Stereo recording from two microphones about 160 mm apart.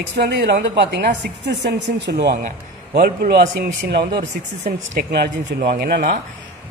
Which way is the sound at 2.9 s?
70° right (ahead or behind).